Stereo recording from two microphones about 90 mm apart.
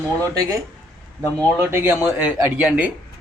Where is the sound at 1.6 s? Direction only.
25° right (ahead or behind).